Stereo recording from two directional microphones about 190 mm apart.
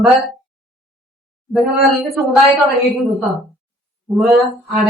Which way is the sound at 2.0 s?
Centre (ahead or behind).